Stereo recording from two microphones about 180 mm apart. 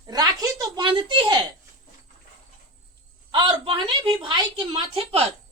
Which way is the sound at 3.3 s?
25° right (ahead or behind).